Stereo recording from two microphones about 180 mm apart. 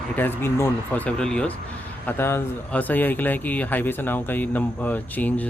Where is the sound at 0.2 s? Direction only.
10° left (ahead or behind).